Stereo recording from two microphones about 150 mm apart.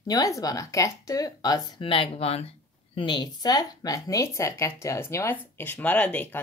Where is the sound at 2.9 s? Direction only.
30° left (ahead or behind).